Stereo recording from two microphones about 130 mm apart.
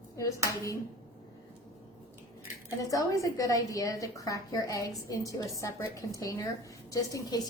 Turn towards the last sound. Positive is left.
turn(degrees=30)  # may be behind; listen again after turning